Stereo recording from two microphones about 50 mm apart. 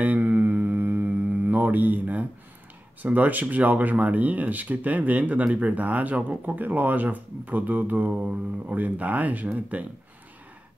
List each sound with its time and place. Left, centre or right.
0.0 s mantra: right
3.0 s speech: right